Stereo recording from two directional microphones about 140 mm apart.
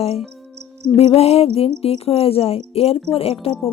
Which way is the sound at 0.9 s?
45° left (ahead or behind).